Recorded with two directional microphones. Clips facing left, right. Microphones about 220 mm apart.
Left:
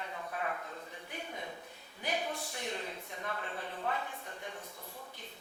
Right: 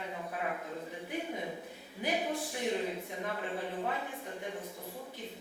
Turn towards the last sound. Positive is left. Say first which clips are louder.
# right 5 dB
turn(degrees=-10)  # may be behind; listen again after turning